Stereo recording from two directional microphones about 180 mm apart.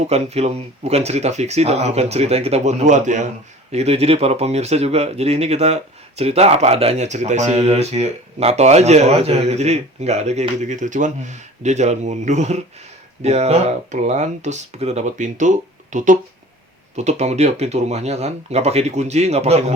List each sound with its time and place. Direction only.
0.0 s speech: 35° right (ahead or behind)